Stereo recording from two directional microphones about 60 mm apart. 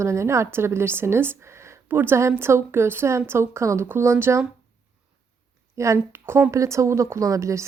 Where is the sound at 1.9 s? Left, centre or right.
Right.